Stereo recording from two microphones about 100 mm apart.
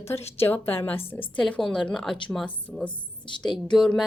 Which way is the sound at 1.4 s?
10° left (ahead or behind).